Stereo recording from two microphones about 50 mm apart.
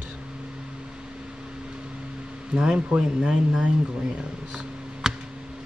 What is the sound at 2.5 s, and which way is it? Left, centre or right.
Speech, centre.